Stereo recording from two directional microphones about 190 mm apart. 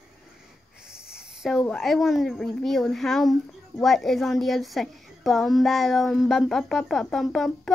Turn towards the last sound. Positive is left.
turn(degrees=0)  # may be behind; listen again after turning